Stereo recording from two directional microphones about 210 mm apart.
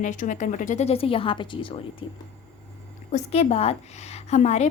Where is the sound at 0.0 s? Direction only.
35° left (ahead or behind).